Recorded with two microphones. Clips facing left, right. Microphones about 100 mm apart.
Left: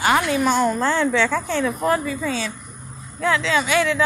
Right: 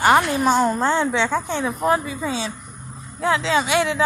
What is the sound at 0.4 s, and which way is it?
Speech, 30° right (ahead or behind).